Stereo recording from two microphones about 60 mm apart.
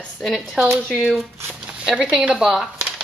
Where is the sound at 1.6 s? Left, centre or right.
Centre.